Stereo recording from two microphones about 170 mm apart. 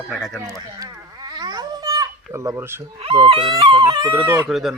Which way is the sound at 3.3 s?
30° right (ahead or behind).